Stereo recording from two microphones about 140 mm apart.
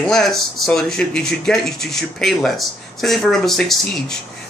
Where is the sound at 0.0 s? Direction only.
5° left (ahead or behind).